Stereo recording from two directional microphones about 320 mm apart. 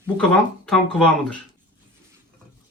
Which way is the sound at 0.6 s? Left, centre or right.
Centre.